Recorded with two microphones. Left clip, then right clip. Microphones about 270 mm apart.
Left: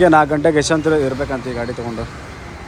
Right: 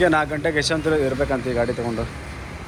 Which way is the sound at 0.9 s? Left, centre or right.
Centre.